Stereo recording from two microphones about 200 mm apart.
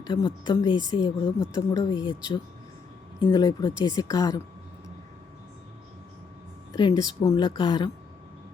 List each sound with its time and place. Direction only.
0.0 s speech: 25° left (ahead or behind)
6.7 s speech: 20° left (ahead or behind)